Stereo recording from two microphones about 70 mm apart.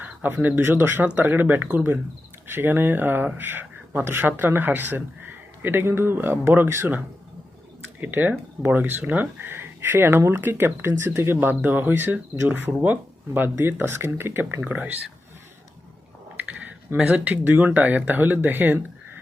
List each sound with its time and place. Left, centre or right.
0.0 s speech: right
8.0 s speech: right
16.4 s computer keyboard: right
17.0 s speech: right